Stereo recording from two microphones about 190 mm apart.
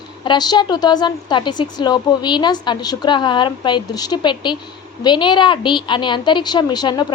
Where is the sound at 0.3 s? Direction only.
20° left (ahead or behind).